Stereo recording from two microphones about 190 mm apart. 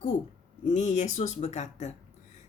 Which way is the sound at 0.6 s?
40° left (ahead or behind).